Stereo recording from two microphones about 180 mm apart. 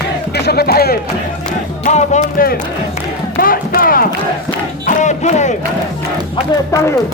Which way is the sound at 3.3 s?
55° left (ahead or behind).